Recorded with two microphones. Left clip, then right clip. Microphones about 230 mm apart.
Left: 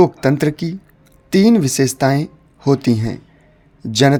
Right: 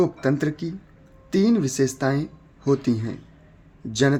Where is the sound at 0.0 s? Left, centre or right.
Left.